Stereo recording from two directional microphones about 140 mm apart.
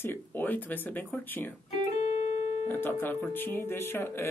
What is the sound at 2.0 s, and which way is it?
Music, 50° left (ahead or behind).